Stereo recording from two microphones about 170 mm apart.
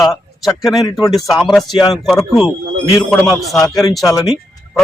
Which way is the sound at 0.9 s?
25° left (ahead or behind).